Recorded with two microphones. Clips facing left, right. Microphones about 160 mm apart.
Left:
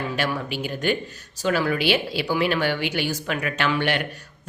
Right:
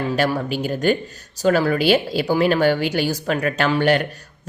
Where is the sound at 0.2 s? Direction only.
40° right (ahead or behind).